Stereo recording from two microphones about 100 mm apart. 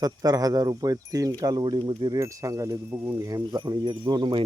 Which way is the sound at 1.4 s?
45° right (ahead or behind).